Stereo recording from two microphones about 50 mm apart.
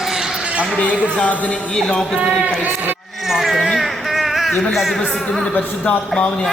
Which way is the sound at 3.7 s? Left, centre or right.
Centre.